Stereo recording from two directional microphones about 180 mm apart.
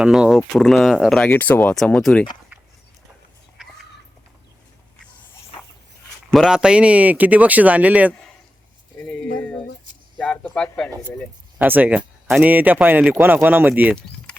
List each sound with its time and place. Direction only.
0.0 s speech: 5° right (ahead or behind)
5.5 s a sound: 30° left (ahead or behind)
6.3 s speech: 5° right (ahead or behind)
10.2 s speech: 5° left (ahead or behind)
11.6 s speech: 10° right (ahead or behind)